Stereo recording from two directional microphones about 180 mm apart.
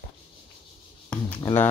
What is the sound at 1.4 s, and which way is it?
Speech, 20° left (ahead or behind).